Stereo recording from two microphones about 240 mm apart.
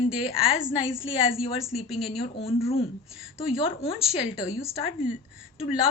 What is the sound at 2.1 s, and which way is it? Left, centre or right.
Speech, left.